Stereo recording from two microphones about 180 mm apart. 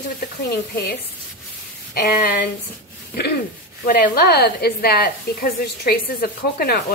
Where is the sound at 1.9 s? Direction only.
55° left (ahead or behind).